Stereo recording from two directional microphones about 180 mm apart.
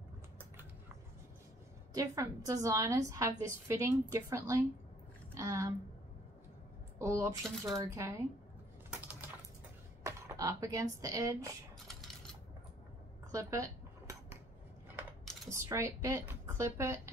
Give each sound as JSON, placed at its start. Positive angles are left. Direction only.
{"t": 2.0, "sound": "a woman's voice", "side_deg": -20}
{"t": 7.0, "sound": "a woman's voice", "side_deg": -15}
{"t": 10.0, "sound": "speech", "side_deg": -15}
{"t": 13.3, "sound": "cutlery", "side_deg": -20}
{"t": 15.5, "sound": "a woman's voice", "side_deg": -15}